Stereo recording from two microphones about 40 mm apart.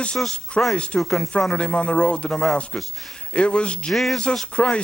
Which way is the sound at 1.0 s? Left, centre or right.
Centre.